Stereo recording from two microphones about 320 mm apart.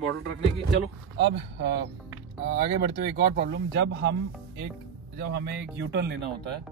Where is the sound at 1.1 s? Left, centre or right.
Right.